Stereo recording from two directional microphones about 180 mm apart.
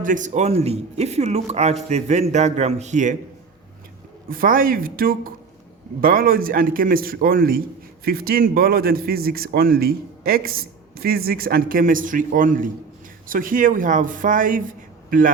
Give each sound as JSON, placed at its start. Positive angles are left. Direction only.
{"t": 0.0, "sound": "speech", "side_deg": -45}
{"t": 4.3, "sound": "a man's voice", "side_deg": -50}